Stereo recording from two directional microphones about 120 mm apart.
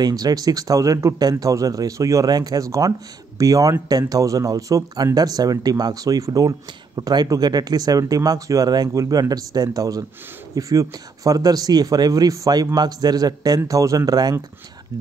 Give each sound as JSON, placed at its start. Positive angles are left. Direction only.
{"t": 0.0, "sound": "speech", "side_deg": -30}